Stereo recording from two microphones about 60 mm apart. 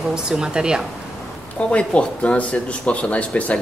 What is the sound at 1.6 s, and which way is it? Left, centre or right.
Speech, centre.